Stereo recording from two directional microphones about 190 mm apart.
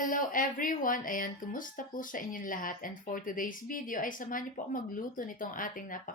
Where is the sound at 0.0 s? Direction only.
45° left (ahead or behind).